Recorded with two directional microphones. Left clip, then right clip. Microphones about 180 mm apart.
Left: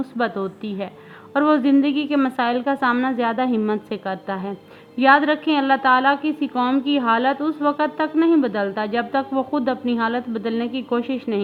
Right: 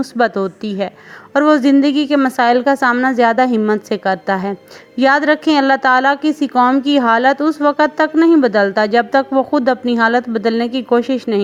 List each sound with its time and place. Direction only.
0.2 s a woman's voice: 40° right (ahead or behind)